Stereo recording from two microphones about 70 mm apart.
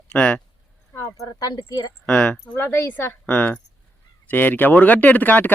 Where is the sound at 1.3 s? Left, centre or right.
Left.